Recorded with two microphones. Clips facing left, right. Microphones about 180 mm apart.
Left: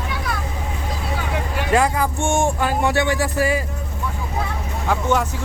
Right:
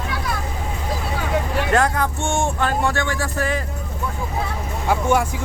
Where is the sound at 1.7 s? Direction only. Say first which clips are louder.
Left 2 dB; 5° left (ahead or behind).